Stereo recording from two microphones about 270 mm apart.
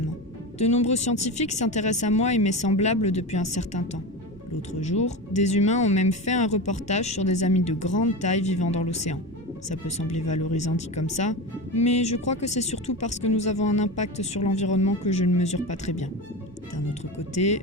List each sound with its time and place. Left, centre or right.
0.6 s speech: left